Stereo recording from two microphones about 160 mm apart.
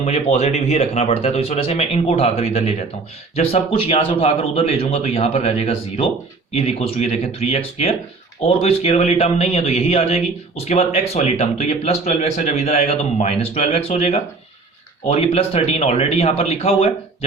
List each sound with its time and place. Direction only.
0.0 s speech: 40° left (ahead or behind)